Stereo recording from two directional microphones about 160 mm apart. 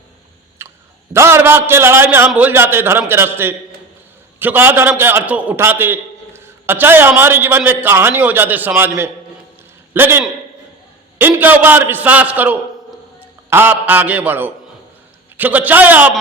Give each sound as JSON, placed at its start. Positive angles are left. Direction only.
{"t": 0.6, "sound": "clicking", "side_deg": -15}
{"t": 1.1, "sound": "a man's voice", "side_deg": -15}